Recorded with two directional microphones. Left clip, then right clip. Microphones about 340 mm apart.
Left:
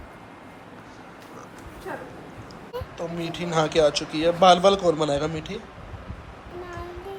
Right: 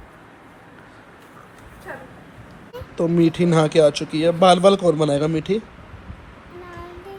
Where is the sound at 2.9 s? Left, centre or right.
Right.